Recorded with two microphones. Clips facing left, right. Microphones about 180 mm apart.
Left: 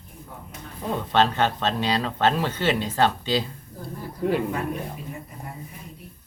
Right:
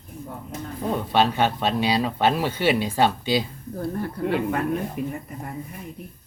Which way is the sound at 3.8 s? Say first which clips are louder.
Right 3 dB; 65° right (ahead or behind).